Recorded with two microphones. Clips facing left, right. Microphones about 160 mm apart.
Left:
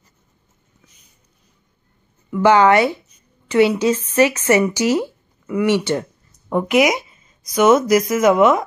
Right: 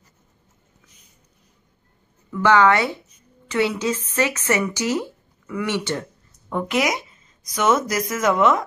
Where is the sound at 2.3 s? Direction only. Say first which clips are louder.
Left 4 dB; 15° left (ahead or behind).